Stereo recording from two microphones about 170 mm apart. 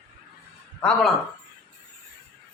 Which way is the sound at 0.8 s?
5° left (ahead or behind).